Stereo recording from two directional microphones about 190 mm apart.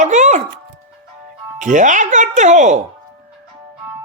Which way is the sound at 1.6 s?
40° right (ahead or behind).